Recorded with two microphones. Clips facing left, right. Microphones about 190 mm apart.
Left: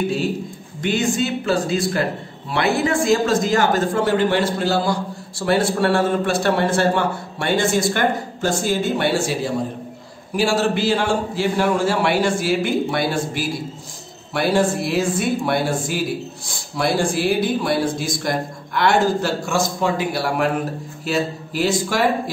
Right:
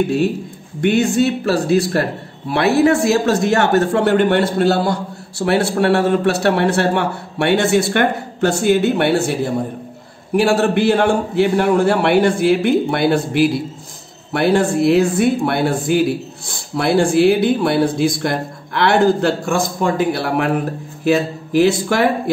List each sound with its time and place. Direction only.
0.7 s a man's voice: 60° right (ahead or behind)